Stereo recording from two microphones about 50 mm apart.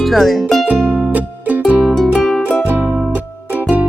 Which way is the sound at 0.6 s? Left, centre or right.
Right.